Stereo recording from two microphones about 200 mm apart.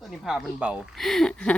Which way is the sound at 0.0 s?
Centre (ahead or behind).